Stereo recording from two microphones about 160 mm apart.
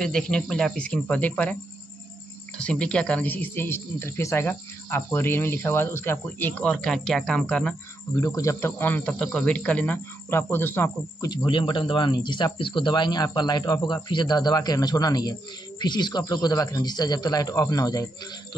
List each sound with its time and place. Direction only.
0.0 s speech: 5° left (ahead or behind)
8.2 s speech: 20° left (ahead or behind)
11.2 s a man's voice: 30° left (ahead or behind)